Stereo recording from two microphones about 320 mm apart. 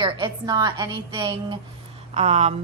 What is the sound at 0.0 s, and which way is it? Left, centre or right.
A woman's voice, centre.